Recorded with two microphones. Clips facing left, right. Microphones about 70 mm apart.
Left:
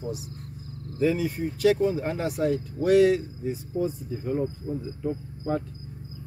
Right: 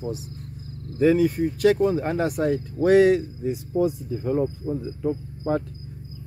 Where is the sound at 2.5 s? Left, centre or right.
Right.